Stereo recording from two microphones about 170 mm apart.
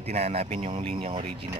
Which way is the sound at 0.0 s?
40° right (ahead or behind).